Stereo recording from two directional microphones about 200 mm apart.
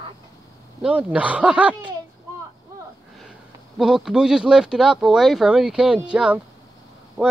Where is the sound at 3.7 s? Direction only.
Centre (ahead or behind).